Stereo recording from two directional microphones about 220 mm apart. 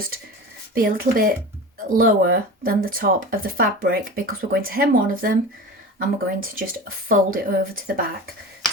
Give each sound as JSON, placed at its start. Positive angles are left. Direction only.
{"t": 0.7, "sound": "speech", "side_deg": -40}